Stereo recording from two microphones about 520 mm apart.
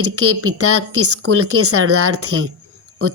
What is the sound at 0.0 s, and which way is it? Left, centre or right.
Speech, right.